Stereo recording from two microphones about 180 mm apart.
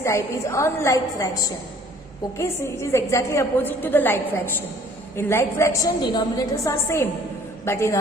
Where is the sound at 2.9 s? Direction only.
15° left (ahead or behind).